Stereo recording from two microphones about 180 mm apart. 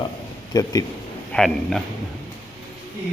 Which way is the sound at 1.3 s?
Centre (ahead or behind).